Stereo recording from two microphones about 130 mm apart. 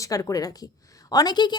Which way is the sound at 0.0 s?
25° left (ahead or behind).